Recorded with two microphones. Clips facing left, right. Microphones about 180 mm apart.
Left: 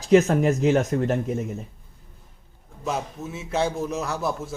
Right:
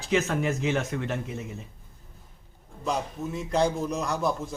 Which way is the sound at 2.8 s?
5° left (ahead or behind).